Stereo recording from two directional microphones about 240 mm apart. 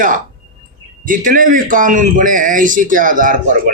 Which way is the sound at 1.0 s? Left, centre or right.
Right.